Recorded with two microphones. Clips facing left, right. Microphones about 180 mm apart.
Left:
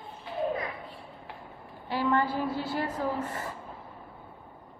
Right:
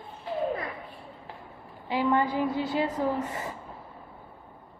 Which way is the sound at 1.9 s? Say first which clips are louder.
Right 2 dB; 15° right (ahead or behind).